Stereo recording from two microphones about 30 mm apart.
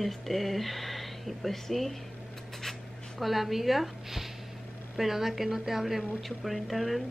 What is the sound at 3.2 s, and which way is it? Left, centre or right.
A woman's voice, centre.